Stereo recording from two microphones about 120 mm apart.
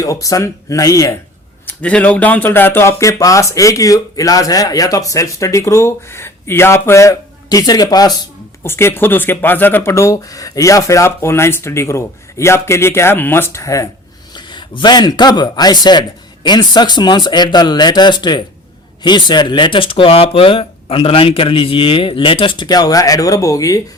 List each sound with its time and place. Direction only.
0.0 s speech: 30° left (ahead or behind)
1.6 s speech: 10° left (ahead or behind); by 8.2 s 30° left (ahead or behind)
8.6 s speech: 20° left (ahead or behind)
14.3 s speech: 40° left (ahead or behind)